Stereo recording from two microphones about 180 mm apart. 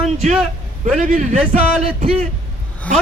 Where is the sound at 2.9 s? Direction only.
5° left (ahead or behind).